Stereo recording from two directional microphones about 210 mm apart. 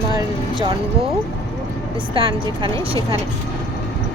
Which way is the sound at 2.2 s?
25° right (ahead or behind).